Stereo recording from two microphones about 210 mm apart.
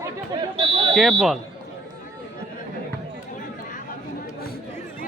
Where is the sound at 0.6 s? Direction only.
25° right (ahead or behind).